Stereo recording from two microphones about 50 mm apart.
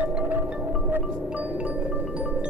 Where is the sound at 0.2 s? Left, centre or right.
Right.